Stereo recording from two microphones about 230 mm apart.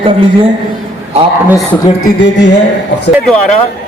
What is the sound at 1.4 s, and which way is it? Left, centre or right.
Speech, centre.